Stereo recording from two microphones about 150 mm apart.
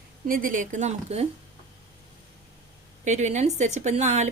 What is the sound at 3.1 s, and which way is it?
A woman's voice, 50° right (ahead or behind).